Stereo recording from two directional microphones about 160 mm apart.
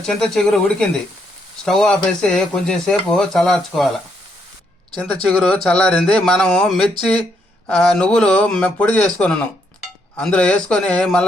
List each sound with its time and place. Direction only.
0.0 s speech: 5° left (ahead or behind)